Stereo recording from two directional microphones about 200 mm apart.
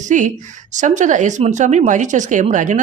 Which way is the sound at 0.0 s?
40° right (ahead or behind).